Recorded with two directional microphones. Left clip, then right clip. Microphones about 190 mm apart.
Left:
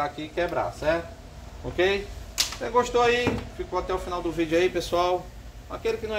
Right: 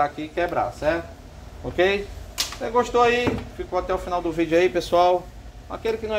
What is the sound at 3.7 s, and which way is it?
Speech, 55° right (ahead or behind).